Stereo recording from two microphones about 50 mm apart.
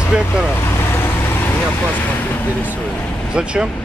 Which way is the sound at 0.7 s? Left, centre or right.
Left.